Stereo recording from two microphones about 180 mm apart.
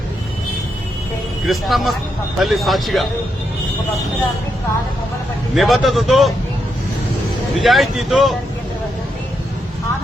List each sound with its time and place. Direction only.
1.5 s speech: centre (ahead or behind)
5.5 s speech: centre (ahead or behind)
7.6 s speech: centre (ahead or behind)